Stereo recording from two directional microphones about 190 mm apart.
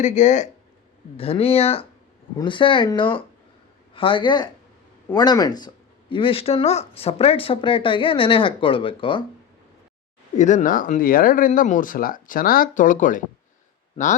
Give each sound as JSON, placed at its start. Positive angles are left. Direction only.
{"t": 0.0, "sound": "speech", "side_deg": 40}
{"t": 10.3, "sound": "speech", "side_deg": 40}